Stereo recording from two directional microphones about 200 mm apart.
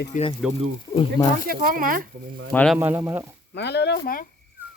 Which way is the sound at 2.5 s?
5° left (ahead or behind).